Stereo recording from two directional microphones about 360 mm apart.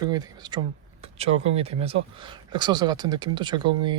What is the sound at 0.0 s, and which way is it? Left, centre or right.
Speech, centre.